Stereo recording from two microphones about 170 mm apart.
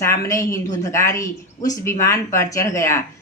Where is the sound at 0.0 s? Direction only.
15° left (ahead or behind).